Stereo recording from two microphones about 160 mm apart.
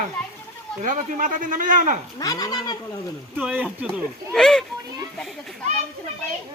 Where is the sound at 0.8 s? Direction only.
55° right (ahead or behind).